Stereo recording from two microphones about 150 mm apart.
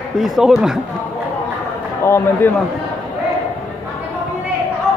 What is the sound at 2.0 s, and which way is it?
Speech, 15° left (ahead or behind).